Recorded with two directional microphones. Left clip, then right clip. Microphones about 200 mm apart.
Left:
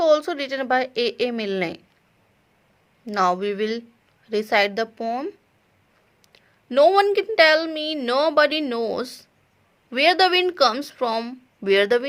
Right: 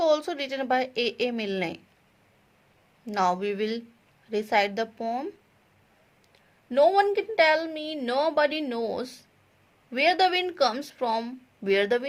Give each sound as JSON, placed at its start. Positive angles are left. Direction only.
{"t": 0.0, "sound": "a woman's voice", "side_deg": 15}
{"t": 3.1, "sound": "a woman's voice", "side_deg": 15}
{"t": 6.3, "sound": "a woman's voice", "side_deg": 25}